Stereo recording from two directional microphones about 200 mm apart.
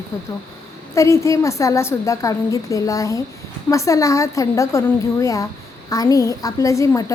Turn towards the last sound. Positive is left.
turn(degrees=15)  # may be behind; listen again after turning